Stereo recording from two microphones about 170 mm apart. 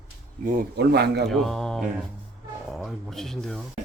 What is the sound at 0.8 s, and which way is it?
Speech, 75° right (ahead or behind).